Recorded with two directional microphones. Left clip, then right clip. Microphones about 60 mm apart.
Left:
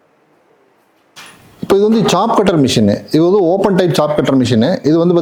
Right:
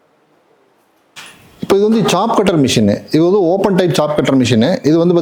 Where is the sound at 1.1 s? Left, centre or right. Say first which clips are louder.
Right 1 dB; centre.